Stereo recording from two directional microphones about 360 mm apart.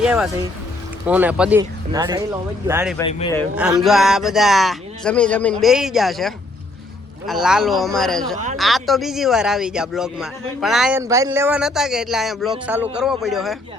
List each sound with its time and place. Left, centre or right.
0.0 s speech: centre
3.0 s speech: centre
3.6 s speech: centre